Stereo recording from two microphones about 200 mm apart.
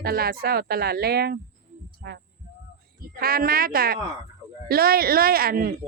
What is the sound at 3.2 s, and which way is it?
Speech, 50° right (ahead or behind).